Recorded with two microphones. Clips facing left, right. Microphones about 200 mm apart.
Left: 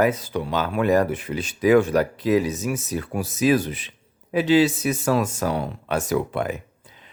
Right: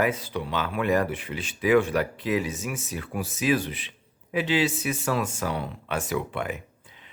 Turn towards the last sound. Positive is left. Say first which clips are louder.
# left 5 dB
turn(degrees=40)  # may be behind; listen again after turning